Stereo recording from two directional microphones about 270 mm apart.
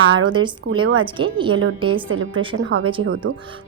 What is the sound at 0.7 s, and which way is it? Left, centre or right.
Speech, right.